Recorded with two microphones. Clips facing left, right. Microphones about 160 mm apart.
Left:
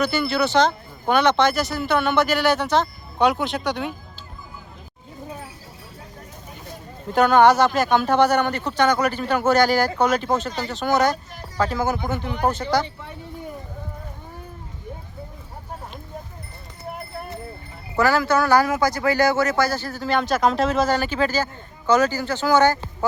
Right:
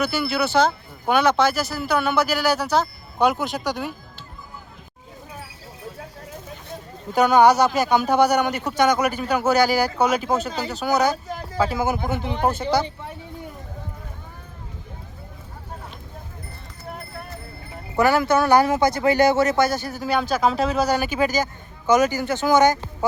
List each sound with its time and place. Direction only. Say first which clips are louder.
0.0 s speech: left 1 dB; 5° right (ahead or behind)
7.1 s speech: even; 5° right (ahead or behind)
9.4 s speech: left 1 dB; 5° right (ahead or behind)
12.2 s speech: right 1 dB; 25° right (ahead or behind)
17.9 s speech: right 1 dB; 20° right (ahead or behind)
20.1 s speech: left 1 dB; 5° right (ahead or behind)
20.9 s speech: even; 15° right (ahead or behind)